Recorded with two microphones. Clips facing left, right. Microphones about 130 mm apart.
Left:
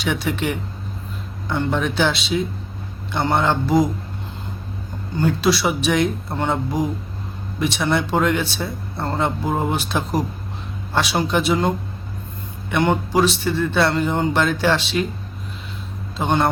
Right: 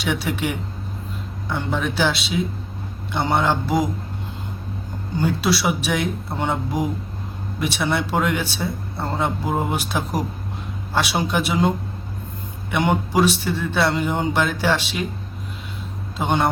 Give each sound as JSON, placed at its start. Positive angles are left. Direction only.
{"t": 0.0, "sound": "speech", "side_deg": -5}
{"t": 5.1, "sound": "speech", "side_deg": -10}
{"t": 12.7, "sound": "speech", "side_deg": -10}
{"t": 16.1, "sound": "speech", "side_deg": -10}